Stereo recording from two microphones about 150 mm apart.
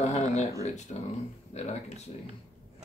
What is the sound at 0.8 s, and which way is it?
Speech, 50° left (ahead or behind).